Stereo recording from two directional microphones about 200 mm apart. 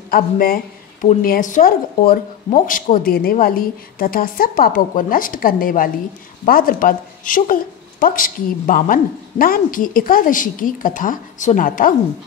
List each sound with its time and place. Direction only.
0.1 s speech: 45° left (ahead or behind)